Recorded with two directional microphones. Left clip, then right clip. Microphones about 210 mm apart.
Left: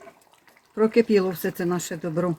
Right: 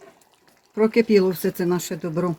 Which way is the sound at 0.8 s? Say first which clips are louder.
Right 2 dB; 30° right (ahead or behind).